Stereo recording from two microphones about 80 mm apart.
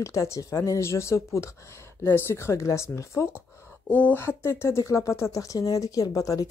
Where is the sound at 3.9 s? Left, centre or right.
Left.